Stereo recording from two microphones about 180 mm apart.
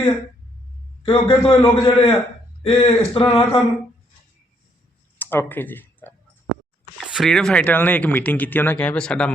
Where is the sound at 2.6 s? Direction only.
30° left (ahead or behind).